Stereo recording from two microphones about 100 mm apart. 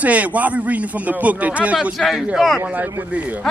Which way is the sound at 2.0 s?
Centre (ahead or behind).